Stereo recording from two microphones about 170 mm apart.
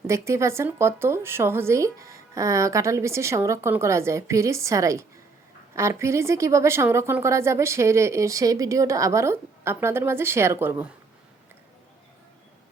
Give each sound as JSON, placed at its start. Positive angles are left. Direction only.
{"t": 0.1, "sound": "a woman's voice", "side_deg": -15}